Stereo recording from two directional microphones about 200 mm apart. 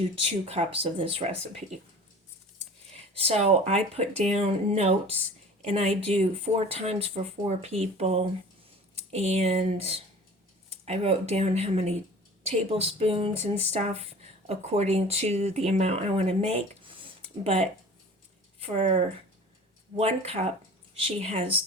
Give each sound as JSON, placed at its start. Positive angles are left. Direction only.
{"t": 0.2, "sound": "speech", "side_deg": -30}
{"t": 2.9, "sound": "speech", "side_deg": -30}